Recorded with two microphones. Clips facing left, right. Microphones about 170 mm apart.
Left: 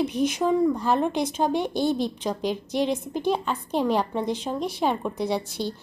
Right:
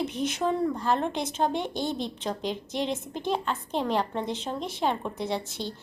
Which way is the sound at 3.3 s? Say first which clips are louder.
Left 3 dB; 10° left (ahead or behind).